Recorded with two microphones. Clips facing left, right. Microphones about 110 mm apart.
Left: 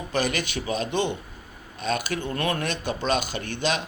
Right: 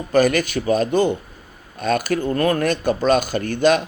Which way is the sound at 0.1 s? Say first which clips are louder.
Right 10 dB; 45° right (ahead or behind).